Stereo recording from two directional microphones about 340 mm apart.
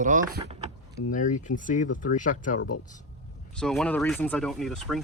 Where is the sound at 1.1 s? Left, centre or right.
Left.